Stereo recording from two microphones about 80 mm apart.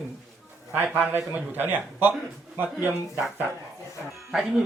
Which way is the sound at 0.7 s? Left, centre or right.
Centre.